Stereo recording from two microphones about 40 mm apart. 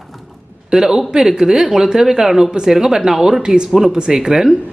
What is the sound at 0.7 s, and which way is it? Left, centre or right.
Speech, centre.